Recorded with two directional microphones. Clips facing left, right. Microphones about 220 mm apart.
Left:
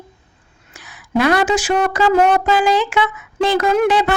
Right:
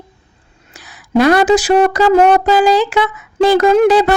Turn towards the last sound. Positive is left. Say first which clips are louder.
# right 5 dB
turn(degrees=-35)  # may be behind; listen again after turning